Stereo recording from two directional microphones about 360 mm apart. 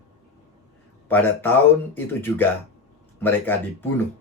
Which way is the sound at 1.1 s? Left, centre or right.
Centre.